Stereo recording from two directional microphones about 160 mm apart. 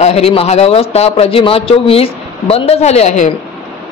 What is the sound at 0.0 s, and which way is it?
A man's voice, 40° left (ahead or behind).